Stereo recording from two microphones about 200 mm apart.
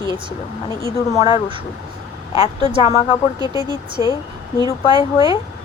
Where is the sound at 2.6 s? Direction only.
25° right (ahead or behind).